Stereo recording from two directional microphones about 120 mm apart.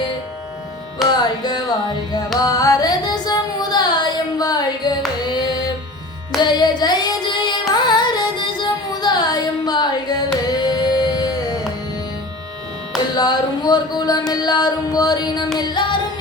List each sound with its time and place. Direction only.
1.2 s carnatic music: 35° left (ahead or behind)
2.4 s music: 30° left (ahead or behind)
6.4 s child singing: 35° left (ahead or behind)
7.7 s carnatic music: 35° left (ahead or behind)
10.5 s a sound: 35° left (ahead or behind)
13.1 s music: 35° left (ahead or behind)